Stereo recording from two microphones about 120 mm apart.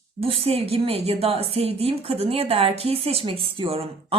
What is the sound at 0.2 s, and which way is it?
A woman's voice, 55° right (ahead or behind).